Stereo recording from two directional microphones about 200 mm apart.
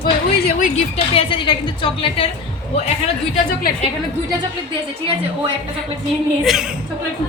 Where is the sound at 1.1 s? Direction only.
25° left (ahead or behind).